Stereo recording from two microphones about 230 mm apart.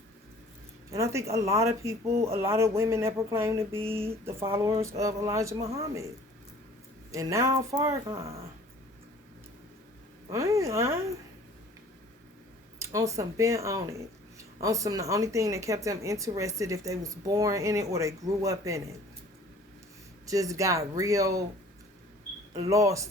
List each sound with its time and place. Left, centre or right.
0.9 s speech: centre
7.1 s speech: centre
8.2 s speech: right
10.2 s speech: centre
12.8 s speech: centre
20.2 s speech: centre
22.5 s speech: centre